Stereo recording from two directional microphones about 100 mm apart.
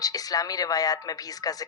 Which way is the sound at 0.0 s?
40° left (ahead or behind).